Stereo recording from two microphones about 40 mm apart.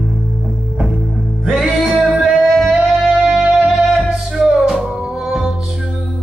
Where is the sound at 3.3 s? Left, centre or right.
Right.